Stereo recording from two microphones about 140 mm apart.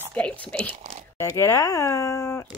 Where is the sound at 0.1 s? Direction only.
10° left (ahead or behind).